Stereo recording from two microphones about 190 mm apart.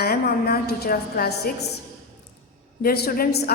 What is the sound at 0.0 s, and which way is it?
A woman's voice, 50° left (ahead or behind).